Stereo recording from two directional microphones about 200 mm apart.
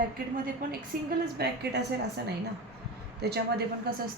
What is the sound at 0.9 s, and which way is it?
Speech, 50° right (ahead or behind).